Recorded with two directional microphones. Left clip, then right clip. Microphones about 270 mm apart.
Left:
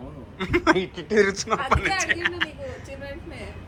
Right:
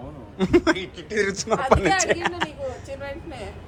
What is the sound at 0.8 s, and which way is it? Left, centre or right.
Speech, centre.